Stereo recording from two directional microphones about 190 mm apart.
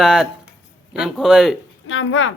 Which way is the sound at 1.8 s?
90° left.